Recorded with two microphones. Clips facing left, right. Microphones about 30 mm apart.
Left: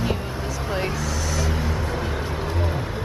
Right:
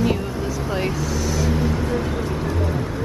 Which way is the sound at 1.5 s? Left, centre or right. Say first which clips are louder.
Right 5 dB; centre.